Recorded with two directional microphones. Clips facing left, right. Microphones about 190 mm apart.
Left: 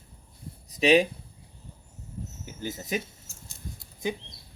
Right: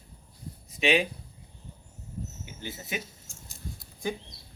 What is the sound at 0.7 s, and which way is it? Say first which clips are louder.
Speech: left 5 dB; 40° left (ahead or behind).